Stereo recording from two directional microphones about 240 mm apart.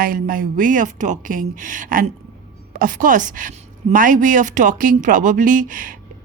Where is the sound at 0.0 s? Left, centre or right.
Right.